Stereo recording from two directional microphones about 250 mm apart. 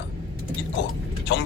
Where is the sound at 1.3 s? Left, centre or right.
Left.